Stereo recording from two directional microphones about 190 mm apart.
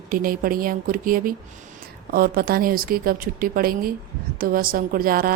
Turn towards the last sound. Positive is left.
turn(degrees=-50)  # may be behind; listen again after turning